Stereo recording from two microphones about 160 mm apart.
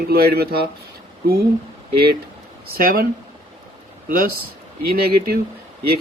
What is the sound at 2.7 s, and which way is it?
Speech, 70° right (ahead or behind).